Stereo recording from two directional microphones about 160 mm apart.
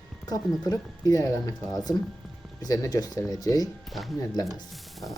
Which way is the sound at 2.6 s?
20° left (ahead or behind).